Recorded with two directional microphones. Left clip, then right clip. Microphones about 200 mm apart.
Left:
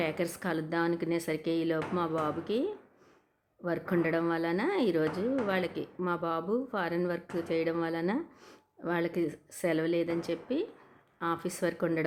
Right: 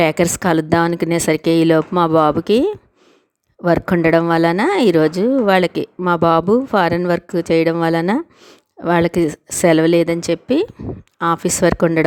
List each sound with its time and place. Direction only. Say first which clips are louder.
0.0 s speech: right 17 dB; 50° right (ahead or behind)